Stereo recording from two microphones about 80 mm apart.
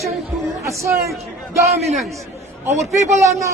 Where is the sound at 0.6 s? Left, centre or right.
Right.